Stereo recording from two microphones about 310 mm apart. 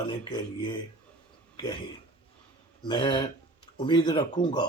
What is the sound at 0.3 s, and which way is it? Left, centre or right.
Speech, centre.